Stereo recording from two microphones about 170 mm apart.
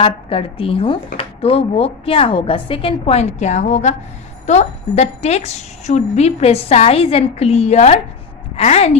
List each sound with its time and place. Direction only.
0.0 s speech: 35° left (ahead or behind)